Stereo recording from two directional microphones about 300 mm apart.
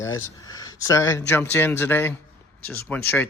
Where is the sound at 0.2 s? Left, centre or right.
Centre.